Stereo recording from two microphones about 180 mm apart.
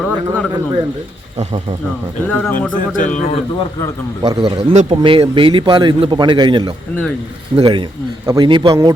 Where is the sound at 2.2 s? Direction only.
10° left (ahead or behind).